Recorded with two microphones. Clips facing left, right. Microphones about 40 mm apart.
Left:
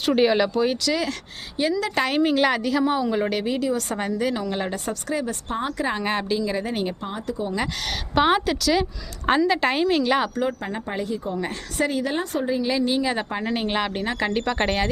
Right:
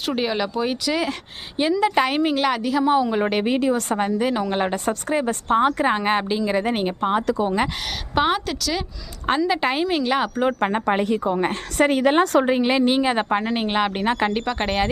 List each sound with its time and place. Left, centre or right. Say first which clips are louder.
0.0 s a woman's voice: left 4 dB; centre
0.6 s a woman's voice: even; centre
3.4 s a woman's voice: right 4 dB; right
3.9 s a woman's voice: right 3 dB; centre; by 5.6 s right
5.6 s a woman's voice: right 6 dB; right
6.6 s a woman's voice: right 5 dB; right
8.3 s a woman's voice: left 3 dB; centre
10.6 s a woman's voice: right 8 dB; right
10.8 s a woman's voice: right 5 dB; right
11.3 s a woman's voice: right 5 dB; right
12.2 s a woman's voice: right 6 dB; right
13.4 s a woman's voice: right 3 dB; centre
14.4 s a woman's voice: left 1 dB; centre